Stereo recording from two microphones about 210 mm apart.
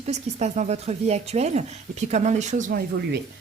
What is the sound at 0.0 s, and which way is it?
Speech, 30° right (ahead or behind).